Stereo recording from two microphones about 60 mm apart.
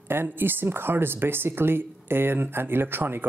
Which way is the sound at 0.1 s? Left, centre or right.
Right.